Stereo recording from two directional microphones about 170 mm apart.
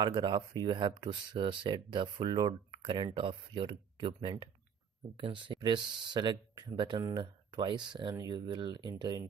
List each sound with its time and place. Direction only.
0.0 s speech: 25° right (ahead or behind)